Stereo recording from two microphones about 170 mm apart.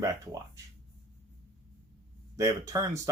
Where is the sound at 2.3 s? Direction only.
20° right (ahead or behind).